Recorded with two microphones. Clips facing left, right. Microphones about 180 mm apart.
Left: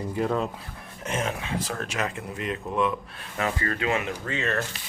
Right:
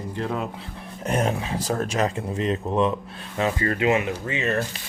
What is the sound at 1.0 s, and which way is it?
Speech, 35° right (ahead or behind).